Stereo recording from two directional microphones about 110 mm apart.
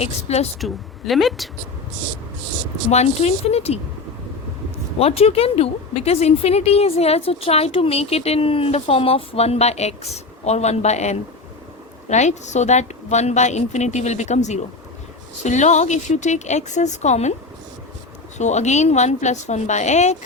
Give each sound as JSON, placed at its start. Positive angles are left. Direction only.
{"t": 0.0, "sound": "speech", "side_deg": 75}
{"t": 0.6, "sound": "a woman's voice", "side_deg": 0}
{"t": 2.9, "sound": "speech", "side_deg": 80}
{"t": 4.9, "sound": "a woman's voice", "side_deg": 65}
{"t": 18.3, "sound": "a woman's voice", "side_deg": 90}